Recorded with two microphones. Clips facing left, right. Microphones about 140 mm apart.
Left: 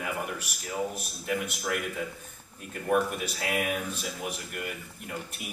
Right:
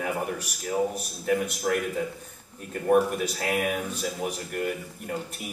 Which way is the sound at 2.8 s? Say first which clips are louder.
Right 5 dB; 40° right (ahead or behind).